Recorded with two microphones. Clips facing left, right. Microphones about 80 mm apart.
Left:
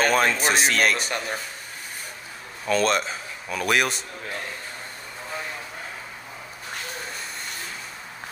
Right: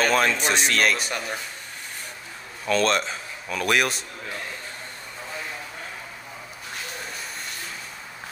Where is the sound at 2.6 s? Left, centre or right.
Centre.